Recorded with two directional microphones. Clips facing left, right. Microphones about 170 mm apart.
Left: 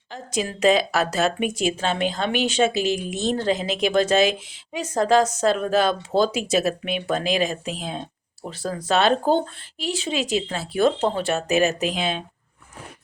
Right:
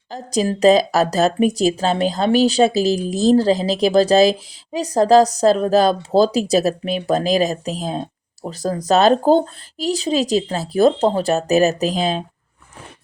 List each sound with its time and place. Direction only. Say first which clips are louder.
0.1 s speech: right 7 dB; 35° right (ahead or behind)